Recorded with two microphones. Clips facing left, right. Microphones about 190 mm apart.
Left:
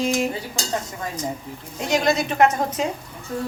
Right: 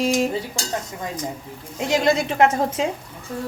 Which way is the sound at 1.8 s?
25° right (ahead or behind).